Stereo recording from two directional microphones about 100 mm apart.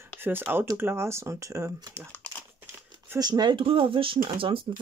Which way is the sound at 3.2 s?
45° right (ahead or behind).